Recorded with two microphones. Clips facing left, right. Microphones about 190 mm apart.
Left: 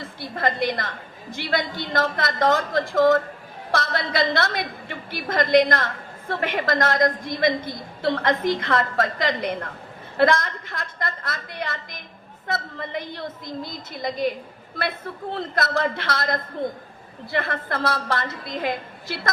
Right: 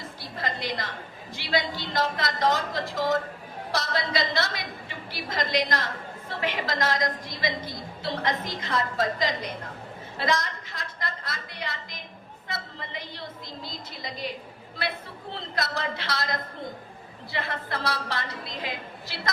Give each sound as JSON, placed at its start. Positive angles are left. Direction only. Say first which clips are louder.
{"t": 0.2, "sound": "a woman's voice", "louder": "left 9 dB", "side_deg": 55}